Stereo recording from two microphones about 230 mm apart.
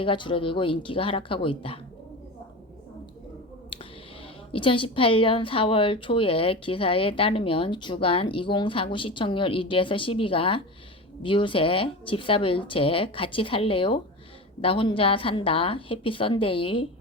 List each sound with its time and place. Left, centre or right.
0.0 s a woman's voice: left
4.5 s a woman's voice: left